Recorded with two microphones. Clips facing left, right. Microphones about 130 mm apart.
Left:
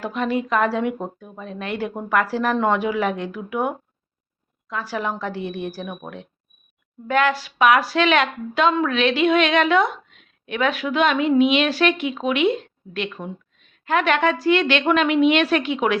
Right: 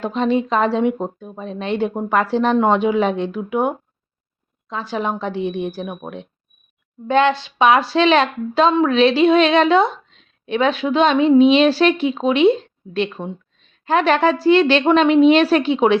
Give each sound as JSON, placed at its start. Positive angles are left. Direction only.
{"t": 0.0, "sound": "a woman's voice", "side_deg": -25}